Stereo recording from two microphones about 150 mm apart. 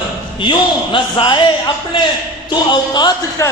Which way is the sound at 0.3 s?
35° left (ahead or behind).